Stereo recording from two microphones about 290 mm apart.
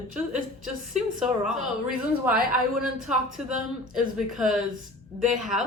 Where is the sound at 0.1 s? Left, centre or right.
Centre.